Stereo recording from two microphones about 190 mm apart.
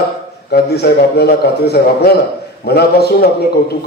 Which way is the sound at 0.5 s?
60° left (ahead or behind).